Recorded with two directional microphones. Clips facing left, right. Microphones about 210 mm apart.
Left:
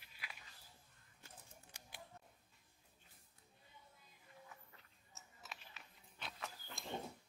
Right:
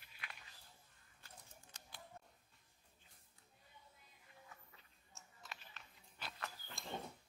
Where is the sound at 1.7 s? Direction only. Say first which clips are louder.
Left 1 dB; 10° left (ahead or behind).